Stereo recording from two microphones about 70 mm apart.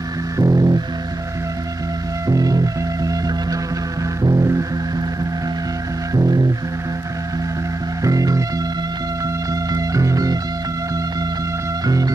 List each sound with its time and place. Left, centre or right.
0.4 s music: right
2.2 s music: right
4.2 s music: right
6.1 s music: right
8.0 s music: right
9.5 s music: right
11.8 s music: right